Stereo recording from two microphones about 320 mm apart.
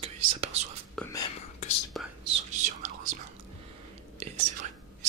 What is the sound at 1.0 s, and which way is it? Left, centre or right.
Whispering, centre.